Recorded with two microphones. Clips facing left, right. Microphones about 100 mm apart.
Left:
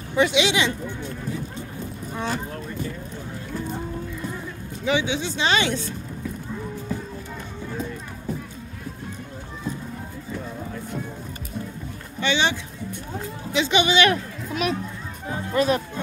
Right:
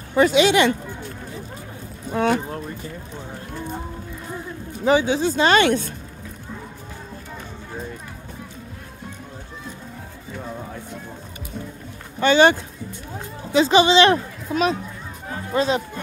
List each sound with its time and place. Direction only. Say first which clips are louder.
0.1 s speech: right 5 dB; 45° right (ahead or behind)
4.8 s speech: right 6 dB; 40° right (ahead or behind)
12.2 s speech: right 8 dB; 45° right (ahead or behind); by 15.8 s 25° right (ahead or behind)